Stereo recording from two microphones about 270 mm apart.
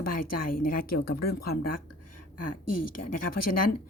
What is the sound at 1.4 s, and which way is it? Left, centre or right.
Speech, left.